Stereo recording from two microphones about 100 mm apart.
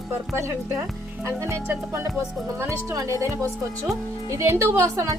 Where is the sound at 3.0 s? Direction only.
25° right (ahead or behind).